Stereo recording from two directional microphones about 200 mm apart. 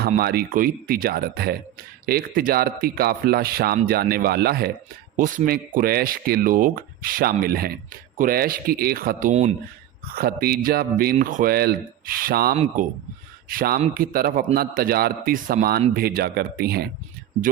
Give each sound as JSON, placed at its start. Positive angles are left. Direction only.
{"t": 0.2, "sound": "speech", "side_deg": -50}